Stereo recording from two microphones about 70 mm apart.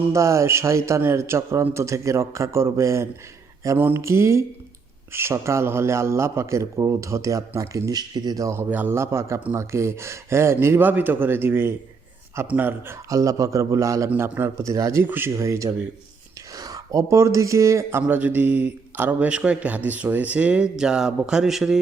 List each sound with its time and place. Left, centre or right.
0.1 s a man's voice: right
3.8 s speech: right
4.0 s a man's voice: right
8.7 s speech: right
9.0 s a man's voice: right
13.1 s a man's voice: right
14.2 s speech: right
14.6 s a man's voice: right
15.0 s speech: right
15.4 s a man's voice: right
16.6 s speech: right
18.1 s a man's voice: right; by 21.8 s centre